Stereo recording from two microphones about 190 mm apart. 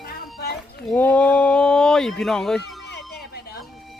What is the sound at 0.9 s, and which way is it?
Speech, 5° left (ahead or behind).